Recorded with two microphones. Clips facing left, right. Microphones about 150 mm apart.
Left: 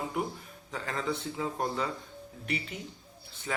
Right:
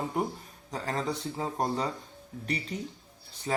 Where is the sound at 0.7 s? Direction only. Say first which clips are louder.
Right 2 dB; 35° right (ahead or behind).